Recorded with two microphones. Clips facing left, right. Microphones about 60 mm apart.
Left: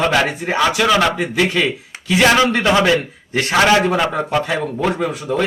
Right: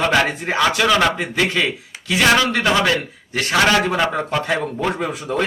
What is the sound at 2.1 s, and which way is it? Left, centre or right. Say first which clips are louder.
A man's voice: left 2 dB; centre.